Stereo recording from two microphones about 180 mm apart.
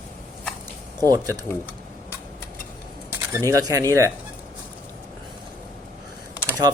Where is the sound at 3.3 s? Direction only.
15° right (ahead or behind).